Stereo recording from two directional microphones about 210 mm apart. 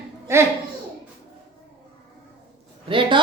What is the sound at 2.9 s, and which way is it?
Speech, 25° right (ahead or behind).